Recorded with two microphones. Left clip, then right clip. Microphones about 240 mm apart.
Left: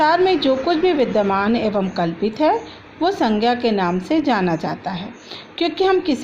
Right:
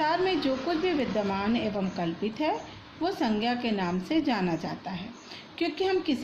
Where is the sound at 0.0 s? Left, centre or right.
Left.